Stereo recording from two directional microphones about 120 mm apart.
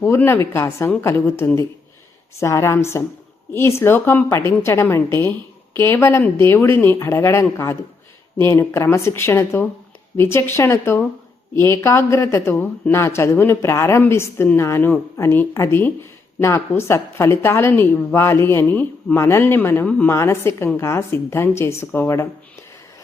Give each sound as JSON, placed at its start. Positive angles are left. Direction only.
{"t": 0.0, "sound": "speech", "side_deg": 20}